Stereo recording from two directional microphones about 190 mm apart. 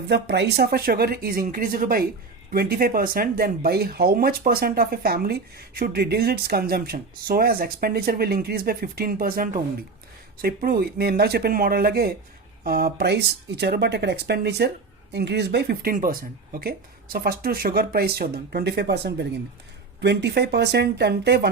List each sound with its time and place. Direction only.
0.1 s speech: 60° right (ahead or behind)